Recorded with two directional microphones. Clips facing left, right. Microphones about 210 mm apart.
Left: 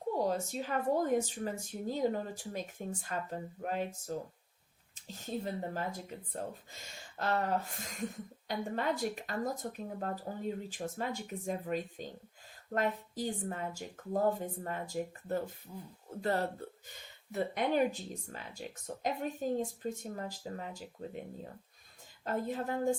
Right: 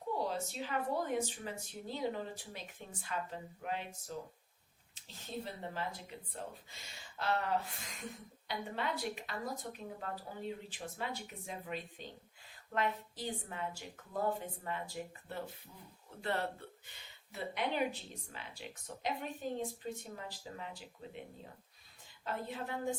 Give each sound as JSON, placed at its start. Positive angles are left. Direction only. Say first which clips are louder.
{"t": 0.2, "sound": "a woman's voice", "louder": "left 5 dB", "side_deg": 45}
{"t": 22.2, "sound": "a woman's voice", "louder": "left 6 dB", "side_deg": 45}